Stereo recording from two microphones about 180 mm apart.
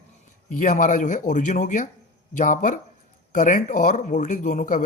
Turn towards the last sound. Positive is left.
turn(degrees=45)  # may be behind; listen again after turning